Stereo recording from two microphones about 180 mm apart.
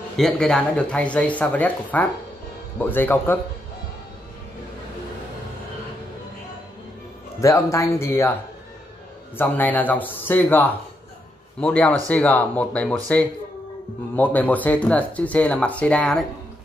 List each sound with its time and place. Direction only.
0.2 s speech: 5° left (ahead or behind)
7.3 s speech: 15° left (ahead or behind)
9.4 s a man's voice: 10° left (ahead or behind)